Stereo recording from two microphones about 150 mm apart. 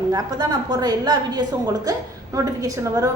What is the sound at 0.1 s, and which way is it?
A woman's voice, 25° right (ahead or behind).